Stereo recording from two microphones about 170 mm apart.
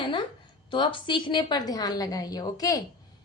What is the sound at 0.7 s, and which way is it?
A woman's voice, 30° left (ahead or behind).